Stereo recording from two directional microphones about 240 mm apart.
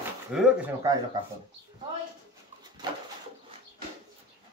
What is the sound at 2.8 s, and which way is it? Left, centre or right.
Bird, centre.